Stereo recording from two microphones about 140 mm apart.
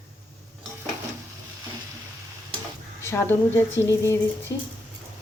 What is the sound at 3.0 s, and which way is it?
A woman's voice, 15° left (ahead or behind).